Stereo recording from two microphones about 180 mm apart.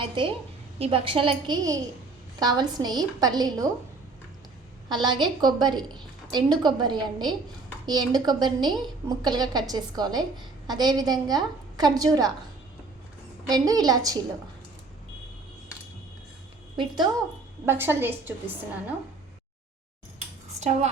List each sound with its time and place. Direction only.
0.2 s a woman's voice: 25° right (ahead or behind)
4.9 s a woman's voice: 25° right (ahead or behind)
13.5 s a woman's voice: 20° right (ahead or behind)
16.7 s a woman's voice: 25° right (ahead or behind)
17.7 s a woman's voice: 10° right (ahead or behind)
20.6 s a woman's voice: 40° right (ahead or behind)